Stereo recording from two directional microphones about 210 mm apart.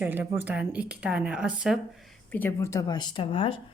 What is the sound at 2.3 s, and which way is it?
Speech, 10° left (ahead or behind).